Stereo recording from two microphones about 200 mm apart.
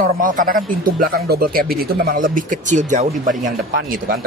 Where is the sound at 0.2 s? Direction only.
40° right (ahead or behind).